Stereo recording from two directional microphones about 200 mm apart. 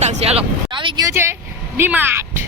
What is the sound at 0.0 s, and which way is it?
Speech, 30° right (ahead or behind).